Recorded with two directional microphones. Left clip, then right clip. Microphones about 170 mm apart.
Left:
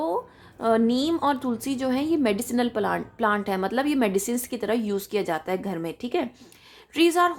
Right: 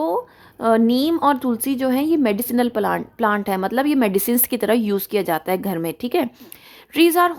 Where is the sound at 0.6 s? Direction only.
30° right (ahead or behind).